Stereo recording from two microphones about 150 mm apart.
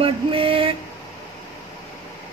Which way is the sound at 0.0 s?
35° right (ahead or behind).